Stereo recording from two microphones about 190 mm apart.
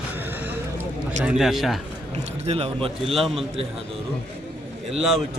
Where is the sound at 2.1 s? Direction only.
35° right (ahead or behind).